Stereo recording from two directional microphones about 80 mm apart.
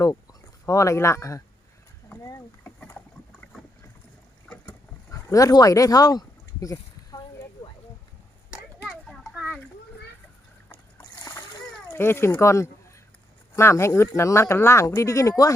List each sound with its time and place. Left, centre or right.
0.6 s speech: left
2.6 s rowboat: left
5.1 s a sound: left
8.4 s a sound: centre
9.3 s children playing: centre
11.2 s splash: left
11.9 s speech: left